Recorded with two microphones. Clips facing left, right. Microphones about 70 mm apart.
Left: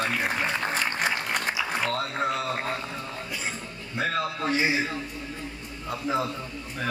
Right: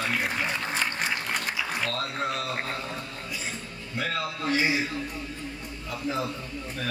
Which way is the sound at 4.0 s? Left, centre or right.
Left.